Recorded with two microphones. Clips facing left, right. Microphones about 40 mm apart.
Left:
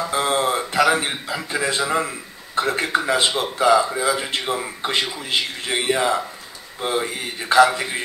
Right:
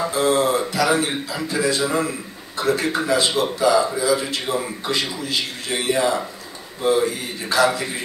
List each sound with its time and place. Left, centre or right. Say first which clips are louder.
0.1 s a man's voice: right 1 dB; left